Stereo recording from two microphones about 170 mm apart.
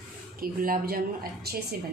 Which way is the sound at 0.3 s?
60° right (ahead or behind).